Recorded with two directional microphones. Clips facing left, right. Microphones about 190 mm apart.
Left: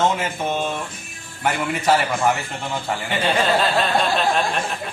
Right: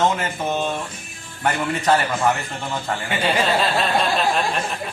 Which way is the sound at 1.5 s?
10° left (ahead or behind).